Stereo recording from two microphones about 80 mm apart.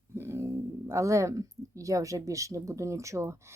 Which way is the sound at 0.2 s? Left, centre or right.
Right.